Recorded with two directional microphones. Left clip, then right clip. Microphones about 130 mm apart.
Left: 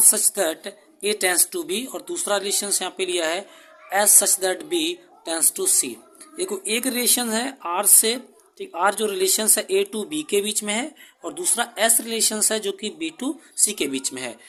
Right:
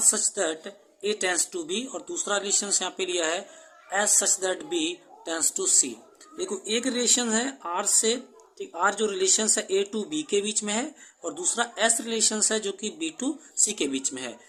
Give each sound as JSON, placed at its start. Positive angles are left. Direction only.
{"t": 0.0, "sound": "a woman's voice", "side_deg": 25}